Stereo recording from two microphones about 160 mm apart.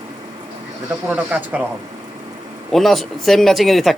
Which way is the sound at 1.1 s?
10° right (ahead or behind).